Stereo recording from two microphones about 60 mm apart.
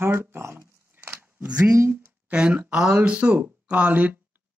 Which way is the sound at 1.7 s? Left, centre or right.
Right.